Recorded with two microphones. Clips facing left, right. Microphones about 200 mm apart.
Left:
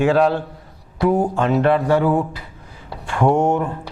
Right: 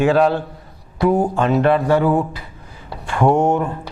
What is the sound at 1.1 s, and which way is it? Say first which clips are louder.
Speech: right 1 dB; 30° right (ahead or behind).